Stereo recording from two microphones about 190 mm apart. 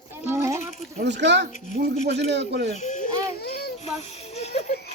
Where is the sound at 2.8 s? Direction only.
40° left (ahead or behind).